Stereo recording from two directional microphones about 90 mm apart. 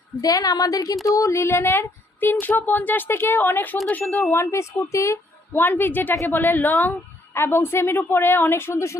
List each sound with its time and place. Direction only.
0.2 s a woman's voice: 45° left (ahead or behind)
5.5 s speech: 25° left (ahead or behind)